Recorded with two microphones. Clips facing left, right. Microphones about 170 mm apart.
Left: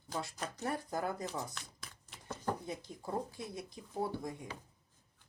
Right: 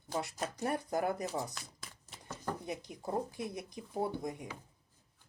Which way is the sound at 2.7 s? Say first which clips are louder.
Right 2 dB; 20° right (ahead or behind).